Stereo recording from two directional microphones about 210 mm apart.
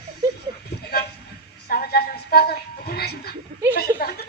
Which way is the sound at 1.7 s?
50° left (ahead or behind).